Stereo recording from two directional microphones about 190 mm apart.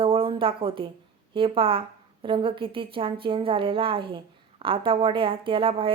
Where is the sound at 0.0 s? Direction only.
30° right (ahead or behind).